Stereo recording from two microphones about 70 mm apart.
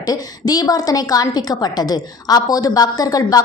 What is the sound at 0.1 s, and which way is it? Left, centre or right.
A woman's voice, left.